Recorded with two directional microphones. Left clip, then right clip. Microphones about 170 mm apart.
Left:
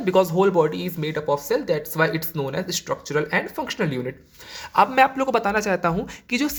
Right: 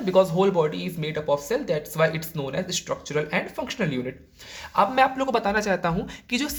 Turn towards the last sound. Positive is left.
turn(degrees=25)  # may be behind; listen again after turning